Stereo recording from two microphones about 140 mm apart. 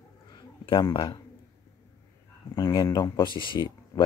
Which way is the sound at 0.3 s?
30° left (ahead or behind).